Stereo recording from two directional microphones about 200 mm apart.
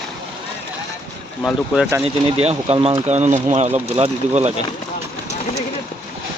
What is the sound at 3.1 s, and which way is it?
Speech, 35° right (ahead or behind).